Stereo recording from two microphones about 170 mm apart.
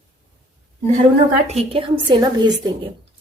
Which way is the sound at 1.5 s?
30° right (ahead or behind).